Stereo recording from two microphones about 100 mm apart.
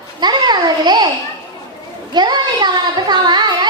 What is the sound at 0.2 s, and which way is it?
Babbling, 45° right (ahead or behind).